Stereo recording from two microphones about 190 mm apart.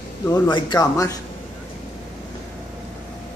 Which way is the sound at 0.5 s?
20° left (ahead or behind).